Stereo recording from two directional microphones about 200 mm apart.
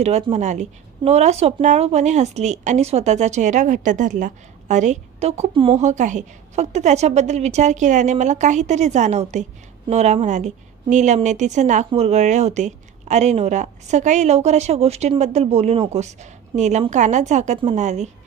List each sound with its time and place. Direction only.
0.0 s speech: 35° right (ahead or behind)